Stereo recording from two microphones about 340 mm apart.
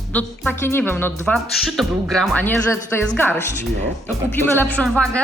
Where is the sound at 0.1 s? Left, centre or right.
Centre.